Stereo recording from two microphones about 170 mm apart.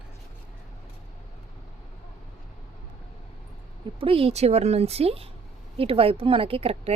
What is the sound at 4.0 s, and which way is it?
Speech, 35° right (ahead or behind).